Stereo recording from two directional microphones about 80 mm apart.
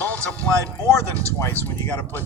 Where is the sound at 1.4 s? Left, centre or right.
Left.